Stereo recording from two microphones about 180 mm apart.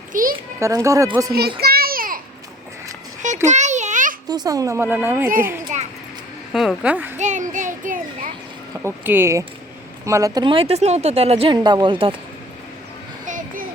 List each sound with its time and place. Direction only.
0.1 s a child's voice: 50° right (ahead or behind)
0.6 s speech: 15° right (ahead or behind)
1.3 s child singing: 60° right (ahead or behind)
3.4 s a sound: 40° right (ahead or behind)
4.3 s speech: 20° right (ahead or behind)
6.5 s speech: centre (ahead or behind)
7.2 s a child's voice: 40° right (ahead or behind)
8.8 s speech: 15° right (ahead or behind); by 12.1 s 30° right (ahead or behind)
13.2 s a sound: 45° right (ahead or behind)